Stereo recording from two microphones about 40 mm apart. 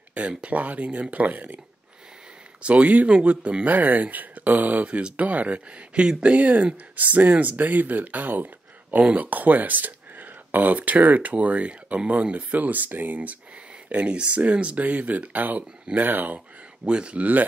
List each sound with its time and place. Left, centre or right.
0.4 s speech: right
2.6 s speech: right
6.3 s speech: right
13.9 s speech: right
14.9 s speech: right
16.8 s speech: right